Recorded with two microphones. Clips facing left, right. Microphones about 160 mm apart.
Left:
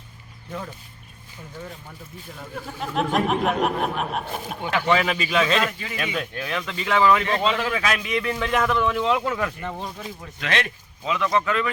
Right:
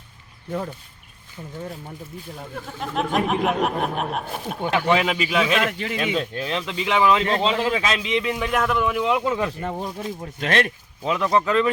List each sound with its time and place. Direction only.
2.7 s speech: centre (ahead or behind)
4.7 s speech: 15° right (ahead or behind)
5.7 s speech: 70° right (ahead or behind)
6.1 s speech: 25° right (ahead or behind); by 9.3 s 10° right (ahead or behind)
9.3 s speech: 25° right (ahead or behind)
10.2 s speech: 45° right (ahead or behind)
11.3 s speech: 30° right (ahead or behind)